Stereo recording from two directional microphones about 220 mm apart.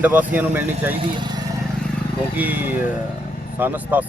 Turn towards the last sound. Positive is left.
turn(degrees=-10)  # may be behind; listen again after turning